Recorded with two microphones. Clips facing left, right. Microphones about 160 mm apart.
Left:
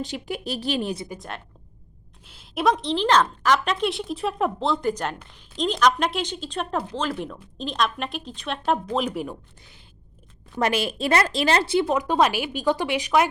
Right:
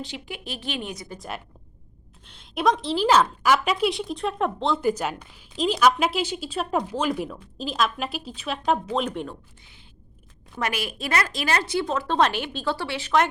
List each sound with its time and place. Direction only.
0.0 s speech: 40° left (ahead or behind)
2.2 s a woman's voice: 5° left (ahead or behind)
10.6 s speech: 30° left (ahead or behind)
11.9 s speech: 10° left (ahead or behind)